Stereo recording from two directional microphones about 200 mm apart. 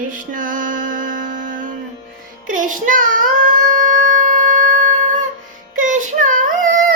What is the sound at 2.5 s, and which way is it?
Child singing, 40° right (ahead or behind).